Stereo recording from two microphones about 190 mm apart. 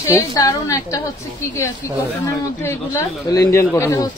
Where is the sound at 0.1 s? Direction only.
20° left (ahead or behind).